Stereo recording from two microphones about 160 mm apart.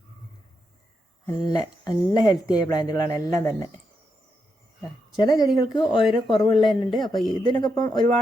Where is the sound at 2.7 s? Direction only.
20° left (ahead or behind).